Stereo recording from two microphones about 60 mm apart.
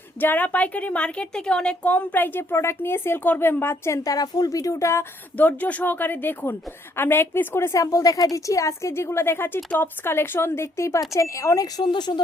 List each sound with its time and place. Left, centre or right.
0.2 s a woman's voice: left
4.0 s speech: left
5.4 s a woman's voice: left
7.8 s a woman's voice: left